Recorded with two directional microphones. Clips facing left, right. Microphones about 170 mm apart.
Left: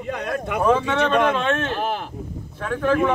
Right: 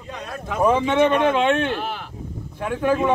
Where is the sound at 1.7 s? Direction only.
50° left (ahead or behind).